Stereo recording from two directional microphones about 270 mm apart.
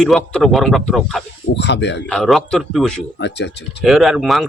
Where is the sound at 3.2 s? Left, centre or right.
Left.